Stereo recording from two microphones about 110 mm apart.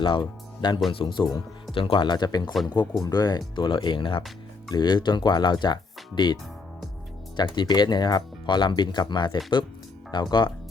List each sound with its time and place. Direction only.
0.0 s speech: 45° left (ahead or behind)
4.7 s speech: 40° left (ahead or behind)